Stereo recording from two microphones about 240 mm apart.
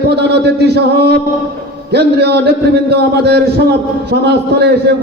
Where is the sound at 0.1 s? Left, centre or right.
Right.